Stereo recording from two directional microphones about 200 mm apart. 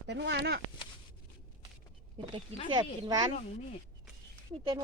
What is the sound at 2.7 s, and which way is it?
Speech, 20° right (ahead or behind).